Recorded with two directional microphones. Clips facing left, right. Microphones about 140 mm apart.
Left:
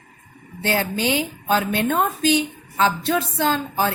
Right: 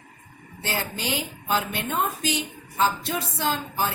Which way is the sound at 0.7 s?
70° left (ahead or behind).